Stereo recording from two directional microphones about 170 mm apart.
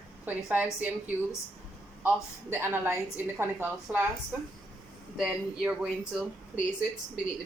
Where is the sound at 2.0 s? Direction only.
10° right (ahead or behind).